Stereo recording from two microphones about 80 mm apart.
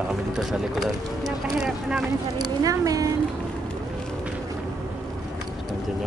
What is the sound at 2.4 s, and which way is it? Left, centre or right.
Speech, right.